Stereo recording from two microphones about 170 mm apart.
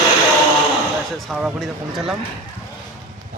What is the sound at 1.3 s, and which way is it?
Speech, centre (ahead or behind).